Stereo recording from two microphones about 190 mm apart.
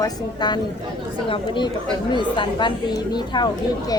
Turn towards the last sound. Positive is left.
turn(degrees=20)  # may be behind; listen again after turning